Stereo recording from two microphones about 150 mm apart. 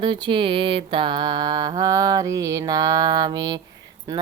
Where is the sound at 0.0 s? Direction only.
35° right (ahead or behind).